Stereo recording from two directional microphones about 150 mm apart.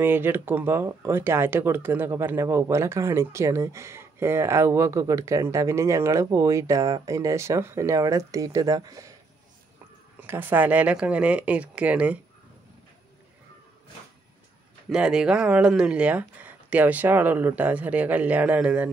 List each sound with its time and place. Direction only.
0.0 s speech: 15° right (ahead or behind)
10.2 s speech: 15° right (ahead or behind)
14.9 s speech: 5° right (ahead or behind)